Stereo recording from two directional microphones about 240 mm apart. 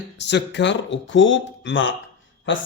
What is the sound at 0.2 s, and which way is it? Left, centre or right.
Speech, left.